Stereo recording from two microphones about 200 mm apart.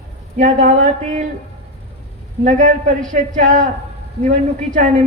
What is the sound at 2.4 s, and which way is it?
A man's voice, 40° right (ahead or behind).